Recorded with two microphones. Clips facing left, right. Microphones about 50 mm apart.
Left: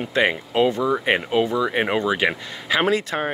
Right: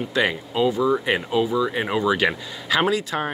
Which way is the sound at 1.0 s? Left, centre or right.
Left.